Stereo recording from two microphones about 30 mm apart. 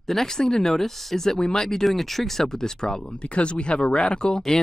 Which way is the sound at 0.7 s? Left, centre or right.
Centre.